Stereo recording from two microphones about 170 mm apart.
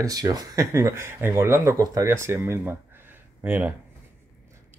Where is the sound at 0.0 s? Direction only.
20° right (ahead or behind).